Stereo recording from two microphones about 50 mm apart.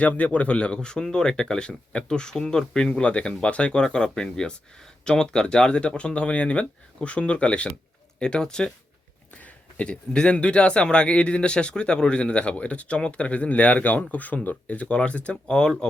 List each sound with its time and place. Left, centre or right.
0.0 s a man's voice: left
15.5 s speech: centre